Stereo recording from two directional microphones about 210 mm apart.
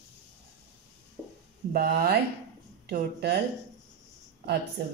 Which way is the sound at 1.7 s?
50° right (ahead or behind).